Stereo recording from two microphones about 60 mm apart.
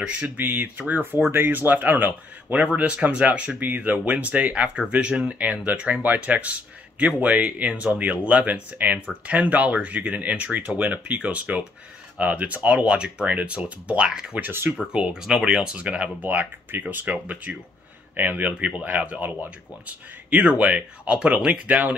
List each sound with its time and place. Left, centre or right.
0.0 s speech: right
0.4 s speech: right; by 5.7 s centre
5.7 s speech: right; by 14.4 s centre
14.4 s speech: right
14.9 s speech: centre